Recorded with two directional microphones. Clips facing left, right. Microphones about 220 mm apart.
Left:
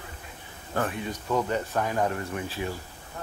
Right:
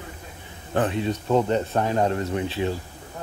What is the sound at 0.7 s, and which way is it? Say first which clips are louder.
Speech: right 6 dB; 20° right (ahead or behind).